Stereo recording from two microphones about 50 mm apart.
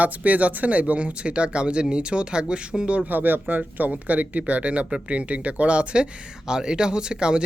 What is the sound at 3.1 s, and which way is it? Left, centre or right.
Speech, right.